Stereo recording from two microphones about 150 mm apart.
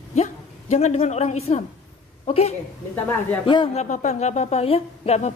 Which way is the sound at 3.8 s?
50° left (ahead or behind).